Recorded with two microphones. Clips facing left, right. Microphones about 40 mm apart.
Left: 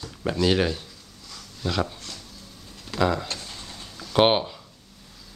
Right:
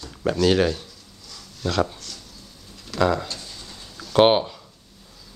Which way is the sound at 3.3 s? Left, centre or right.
Left.